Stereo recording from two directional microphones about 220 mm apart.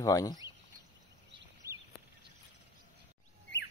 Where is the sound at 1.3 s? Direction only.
15° right (ahead or behind).